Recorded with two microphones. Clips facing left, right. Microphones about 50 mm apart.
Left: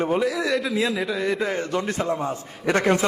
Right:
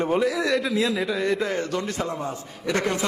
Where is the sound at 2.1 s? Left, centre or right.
Left.